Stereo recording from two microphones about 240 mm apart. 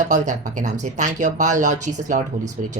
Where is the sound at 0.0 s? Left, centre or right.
Right.